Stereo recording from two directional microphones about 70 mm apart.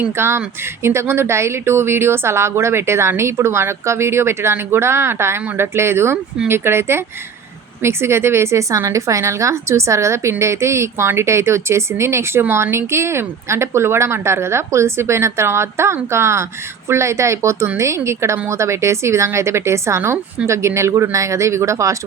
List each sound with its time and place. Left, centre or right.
0.2 s a woman's voice: right